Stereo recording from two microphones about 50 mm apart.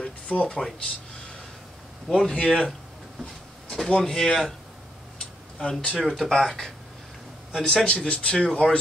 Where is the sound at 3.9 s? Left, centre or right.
Centre.